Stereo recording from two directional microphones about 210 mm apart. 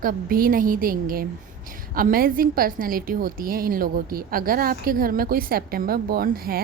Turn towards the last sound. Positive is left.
turn(degrees=-45)  # may be behind; listen again after turning